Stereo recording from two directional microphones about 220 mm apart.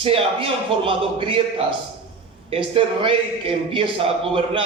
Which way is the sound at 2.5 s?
25° right (ahead or behind).